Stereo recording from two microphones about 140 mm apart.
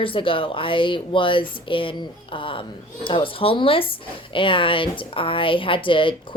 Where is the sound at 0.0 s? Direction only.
40° left (ahead or behind).